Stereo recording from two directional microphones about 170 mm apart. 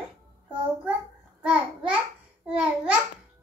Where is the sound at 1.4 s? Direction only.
5° right (ahead or behind).